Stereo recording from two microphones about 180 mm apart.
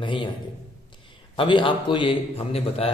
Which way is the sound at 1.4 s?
30° left (ahead or behind).